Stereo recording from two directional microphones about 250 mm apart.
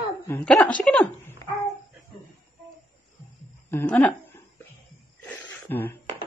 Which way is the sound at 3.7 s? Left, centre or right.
Centre.